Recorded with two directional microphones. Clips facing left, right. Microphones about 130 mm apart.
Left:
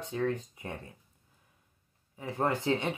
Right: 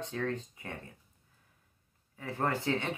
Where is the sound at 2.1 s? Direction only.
15° left (ahead or behind).